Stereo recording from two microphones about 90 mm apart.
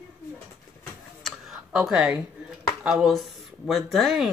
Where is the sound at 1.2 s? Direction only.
5° right (ahead or behind).